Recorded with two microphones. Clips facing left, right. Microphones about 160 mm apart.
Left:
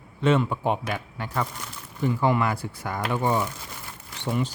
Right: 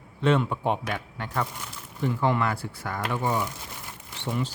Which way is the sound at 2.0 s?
5° left (ahead or behind).